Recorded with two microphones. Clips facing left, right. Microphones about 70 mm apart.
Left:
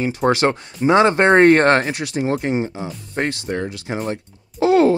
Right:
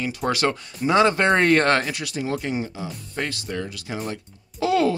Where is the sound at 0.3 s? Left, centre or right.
Left.